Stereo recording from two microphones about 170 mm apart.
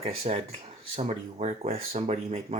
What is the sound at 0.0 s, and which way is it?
Speech, 35° right (ahead or behind).